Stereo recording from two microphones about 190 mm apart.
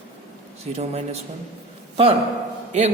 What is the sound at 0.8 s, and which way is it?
Speech, 35° right (ahead or behind).